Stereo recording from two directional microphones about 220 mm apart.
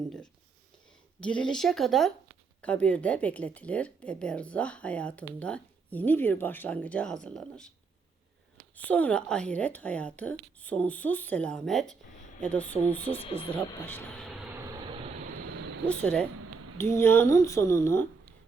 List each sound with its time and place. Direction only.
1.2 s speech: 5° left (ahead or behind)
8.7 s a woman's voice: 5° left (ahead or behind)
13.1 s speech: 25° left (ahead or behind)
13.5 s speech: 10° left (ahead or behind)
15.9 s a woman's voice: 5° left (ahead or behind)